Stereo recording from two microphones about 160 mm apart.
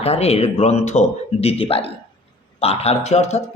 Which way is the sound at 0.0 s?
40° left (ahead or behind).